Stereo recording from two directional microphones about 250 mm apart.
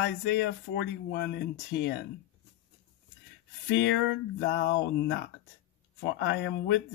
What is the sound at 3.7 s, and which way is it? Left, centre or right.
Speech, left.